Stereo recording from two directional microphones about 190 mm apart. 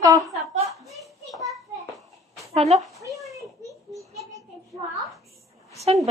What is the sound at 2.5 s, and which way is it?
Speech, 35° right (ahead or behind).